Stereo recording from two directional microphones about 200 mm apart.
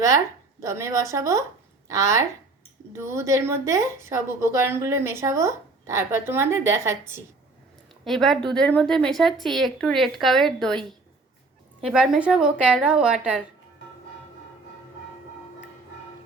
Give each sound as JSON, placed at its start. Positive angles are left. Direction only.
{"t": 0.6, "sound": "a woman's voice", "side_deg": -15}
{"t": 8.0, "sound": "speech", "side_deg": 0}
{"t": 11.8, "sound": "speech", "side_deg": -5}